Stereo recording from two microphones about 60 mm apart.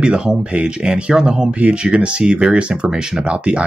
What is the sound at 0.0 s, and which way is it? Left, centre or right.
Speech, centre.